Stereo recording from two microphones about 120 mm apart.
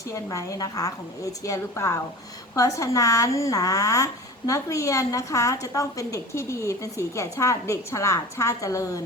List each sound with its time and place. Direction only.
0.1 s speech: 30° left (ahead or behind)